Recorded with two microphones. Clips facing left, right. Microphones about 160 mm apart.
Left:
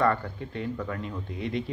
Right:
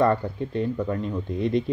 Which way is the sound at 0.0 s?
25° right (ahead or behind).